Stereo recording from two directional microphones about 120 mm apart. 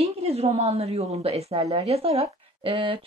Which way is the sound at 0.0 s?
55° right (ahead or behind).